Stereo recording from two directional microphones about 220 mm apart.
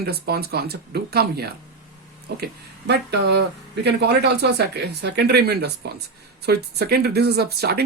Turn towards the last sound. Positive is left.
turn(degrees=-45)  # may be behind; listen again after turning